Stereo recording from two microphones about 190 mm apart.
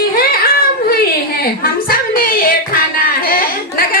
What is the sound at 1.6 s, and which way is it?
Music, 50° left (ahead or behind).